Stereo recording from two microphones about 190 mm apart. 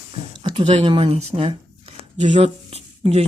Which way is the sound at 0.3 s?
25° right (ahead or behind).